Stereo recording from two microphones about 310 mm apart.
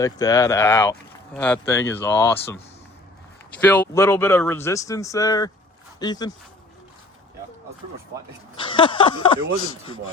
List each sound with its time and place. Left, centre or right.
0.0 s speech: centre
3.6 s speech: centre
8.6 s speech: centre